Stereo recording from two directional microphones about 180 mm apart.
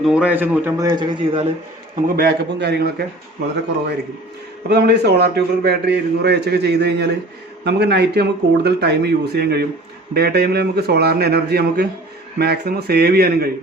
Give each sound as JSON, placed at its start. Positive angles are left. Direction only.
{"t": 0.0, "sound": "a man's voice", "side_deg": -5}
{"t": 2.1, "sound": "a man's voice", "side_deg": -65}
{"t": 4.7, "sound": "a man's voice", "side_deg": -65}